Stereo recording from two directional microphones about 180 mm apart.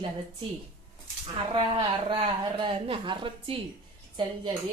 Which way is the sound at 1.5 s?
30° right (ahead or behind).